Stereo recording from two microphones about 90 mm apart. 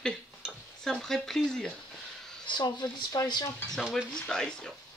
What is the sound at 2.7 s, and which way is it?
Speech, 45° left (ahead or behind).